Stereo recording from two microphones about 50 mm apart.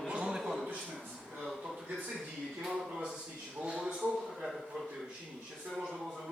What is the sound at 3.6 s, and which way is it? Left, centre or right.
Speech, centre.